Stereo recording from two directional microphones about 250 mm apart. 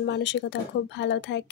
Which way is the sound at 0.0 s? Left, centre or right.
Left.